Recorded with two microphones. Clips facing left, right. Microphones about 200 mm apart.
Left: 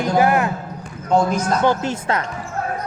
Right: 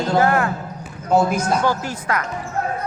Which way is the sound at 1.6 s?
25° left (ahead or behind).